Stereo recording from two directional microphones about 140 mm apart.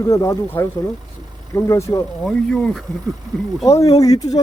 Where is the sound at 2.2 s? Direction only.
Centre (ahead or behind).